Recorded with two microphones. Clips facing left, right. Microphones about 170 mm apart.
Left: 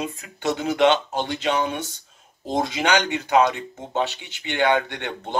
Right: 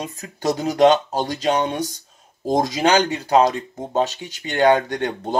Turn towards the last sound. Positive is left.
turn(degrees=-40)  # may be behind; listen again after turning